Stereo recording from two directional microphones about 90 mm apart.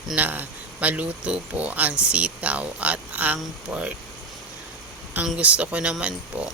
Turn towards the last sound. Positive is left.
turn(degrees=-10)  # may be behind; listen again after turning